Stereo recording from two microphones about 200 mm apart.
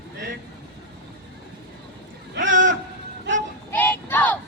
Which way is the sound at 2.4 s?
70° right (ahead or behind).